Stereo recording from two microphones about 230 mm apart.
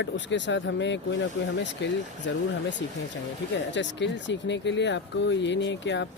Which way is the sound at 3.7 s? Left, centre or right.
Left.